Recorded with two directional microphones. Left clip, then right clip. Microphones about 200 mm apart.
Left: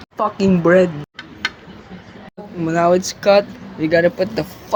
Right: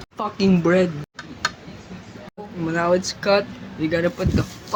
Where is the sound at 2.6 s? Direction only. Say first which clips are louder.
Left 5 dB; 15° left (ahead or behind).